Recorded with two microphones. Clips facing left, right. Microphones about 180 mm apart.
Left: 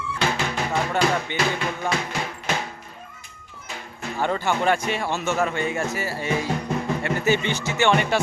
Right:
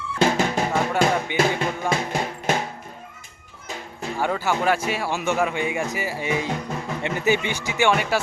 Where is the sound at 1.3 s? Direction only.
10° right (ahead or behind).